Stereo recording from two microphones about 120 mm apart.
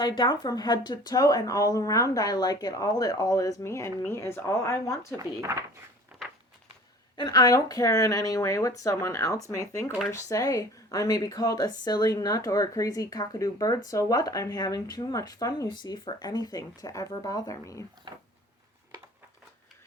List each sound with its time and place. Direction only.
0.0 s speech: 40° left (ahead or behind); by 4.9 s 25° left (ahead or behind)
5.1 s speech: 25° right (ahead or behind)
6.2 s a sound: 5° left (ahead or behind)
7.2 s speech: 35° left (ahead or behind)
18.1 s speech: 40° right (ahead or behind)